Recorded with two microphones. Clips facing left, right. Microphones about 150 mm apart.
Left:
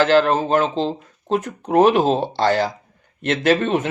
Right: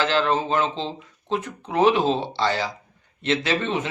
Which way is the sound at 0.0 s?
50° left (ahead or behind).